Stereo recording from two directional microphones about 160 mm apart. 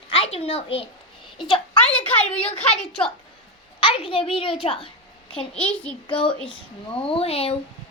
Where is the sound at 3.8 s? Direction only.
35° left (ahead or behind).